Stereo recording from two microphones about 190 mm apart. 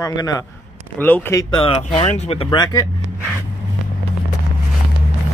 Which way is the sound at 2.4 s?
20° left (ahead or behind).